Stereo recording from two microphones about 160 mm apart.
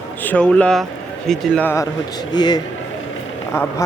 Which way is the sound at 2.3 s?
25° left (ahead or behind).